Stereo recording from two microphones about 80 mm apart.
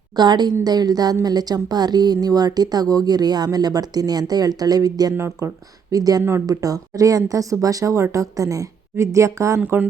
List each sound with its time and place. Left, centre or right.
0.2 s speech: right
5.1 s speech: right
5.9 s speech: right
9.6 s speech: right